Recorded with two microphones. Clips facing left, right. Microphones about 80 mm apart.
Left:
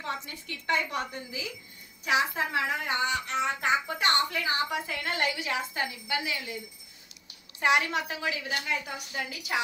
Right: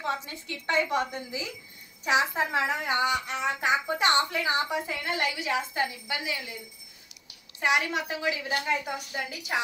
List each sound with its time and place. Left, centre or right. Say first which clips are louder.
0.0 s a woman's voice: right 4 dB; right
2.9 s speech: right 2 dB; centre
7.6 s speech: left 1 dB; centre
8.5 s a woman's voice: right 4 dB; right